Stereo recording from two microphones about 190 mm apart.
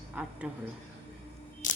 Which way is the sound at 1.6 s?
40° left (ahead or behind).